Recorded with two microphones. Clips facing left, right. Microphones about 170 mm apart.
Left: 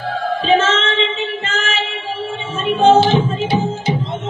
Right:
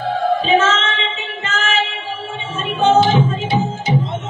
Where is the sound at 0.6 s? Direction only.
30° left (ahead or behind).